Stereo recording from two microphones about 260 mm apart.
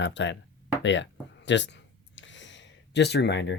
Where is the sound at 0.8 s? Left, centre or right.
Left.